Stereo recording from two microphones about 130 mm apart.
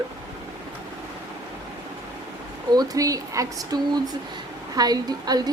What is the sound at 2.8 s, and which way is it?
A woman's voice, 25° right (ahead or behind).